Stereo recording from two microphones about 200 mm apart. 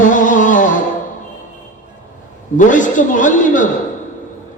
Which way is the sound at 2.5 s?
40° left (ahead or behind).